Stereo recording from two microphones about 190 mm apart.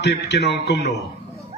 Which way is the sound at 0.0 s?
60° left (ahead or behind).